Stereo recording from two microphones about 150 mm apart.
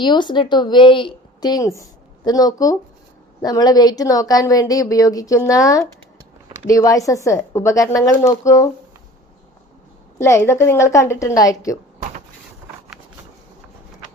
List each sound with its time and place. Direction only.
0.0 s a woman's voice: 30° left (ahead or behind)
10.2 s a woman's voice: 20° left (ahead or behind)